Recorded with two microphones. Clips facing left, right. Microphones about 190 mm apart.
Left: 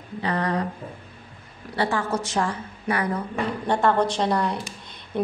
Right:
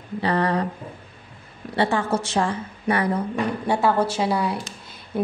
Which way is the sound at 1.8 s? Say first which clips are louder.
Right 3 dB; 25° right (ahead or behind).